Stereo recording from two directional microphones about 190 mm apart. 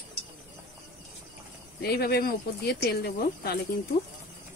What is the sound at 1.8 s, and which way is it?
Speech, 55° left (ahead or behind).